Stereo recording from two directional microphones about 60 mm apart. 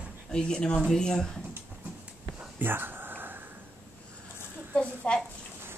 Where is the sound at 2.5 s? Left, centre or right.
Right.